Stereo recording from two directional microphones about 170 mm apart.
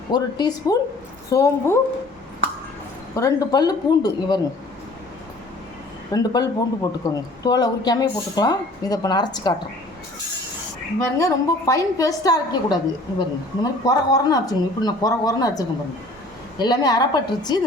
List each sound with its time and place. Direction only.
0.1 s a woman's voice: 25° left (ahead or behind)
3.2 s a woman's voice: 20° left (ahead or behind)
6.1 s a woman's voice: 25° left (ahead or behind)
11.2 s a woman's voice: 15° left (ahead or behind)